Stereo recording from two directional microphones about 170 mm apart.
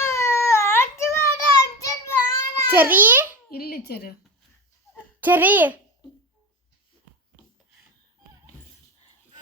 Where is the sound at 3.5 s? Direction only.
65° left (ahead or behind).